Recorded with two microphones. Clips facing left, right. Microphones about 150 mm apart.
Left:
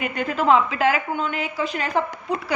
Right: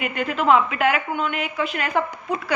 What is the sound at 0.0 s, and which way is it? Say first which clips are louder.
A woman's voice: even; 30° left (ahead or behind).